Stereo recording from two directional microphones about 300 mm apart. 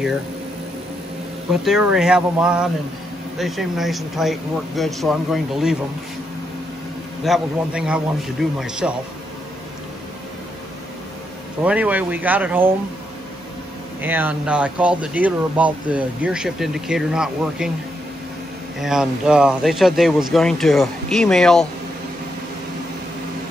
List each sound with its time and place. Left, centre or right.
1.5 s speech: centre
7.2 s speech: centre
11.6 s speech: centre
14.0 s speech: centre
18.8 s speech: centre